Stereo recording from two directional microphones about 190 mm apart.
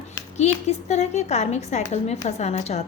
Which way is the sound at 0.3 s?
35° left (ahead or behind).